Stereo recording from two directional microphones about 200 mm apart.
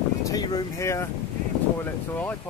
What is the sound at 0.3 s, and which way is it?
Speech, 20° left (ahead or behind).